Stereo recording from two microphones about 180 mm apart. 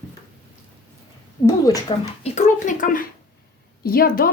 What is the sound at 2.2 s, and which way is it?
A woman's voice, 35° left (ahead or behind).